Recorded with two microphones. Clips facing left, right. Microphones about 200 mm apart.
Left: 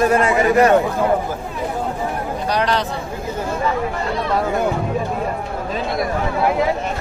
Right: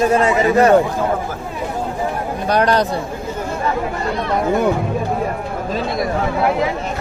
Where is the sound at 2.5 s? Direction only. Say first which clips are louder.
Right 5 dB; 45° right (ahead or behind).